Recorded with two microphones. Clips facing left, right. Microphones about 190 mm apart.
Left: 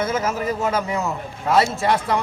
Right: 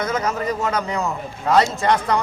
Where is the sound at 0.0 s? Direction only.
5° left (ahead or behind).